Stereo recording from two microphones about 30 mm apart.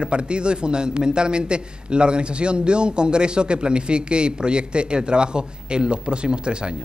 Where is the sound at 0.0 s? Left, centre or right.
Right.